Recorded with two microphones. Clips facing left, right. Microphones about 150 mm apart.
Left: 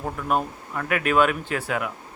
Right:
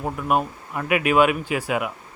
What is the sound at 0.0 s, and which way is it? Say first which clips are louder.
A man's voice: right 2 dB; 10° right (ahead or behind).